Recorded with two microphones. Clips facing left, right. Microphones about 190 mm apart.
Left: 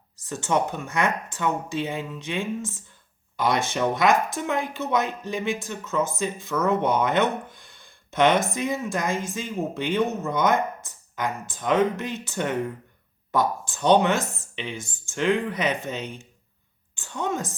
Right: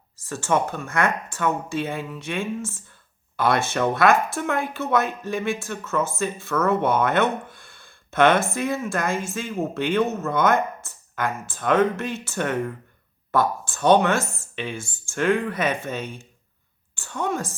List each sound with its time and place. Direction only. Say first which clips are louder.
0.2 s speech: right 1 dB; 20° left (ahead or behind)